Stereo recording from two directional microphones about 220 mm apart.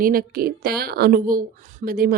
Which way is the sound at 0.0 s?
40° right (ahead or behind).